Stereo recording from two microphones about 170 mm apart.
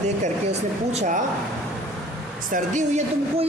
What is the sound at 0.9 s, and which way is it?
Speech, 40° right (ahead or behind).